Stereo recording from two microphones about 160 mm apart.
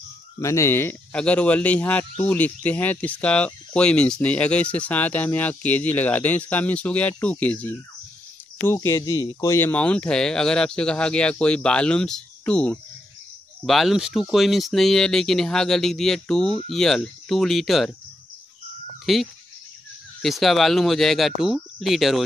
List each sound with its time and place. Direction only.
0.4 s speech: 20° left (ahead or behind)
9.7 s speech: 10° left (ahead or behind)
19.1 s speech: centre (ahead or behind)